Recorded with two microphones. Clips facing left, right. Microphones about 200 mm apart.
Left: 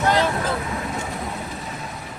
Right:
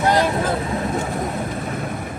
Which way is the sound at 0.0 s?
15° right (ahead or behind).